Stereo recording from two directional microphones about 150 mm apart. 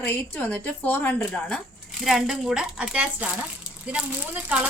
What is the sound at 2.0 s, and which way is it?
A woman's voice, 5° right (ahead or behind).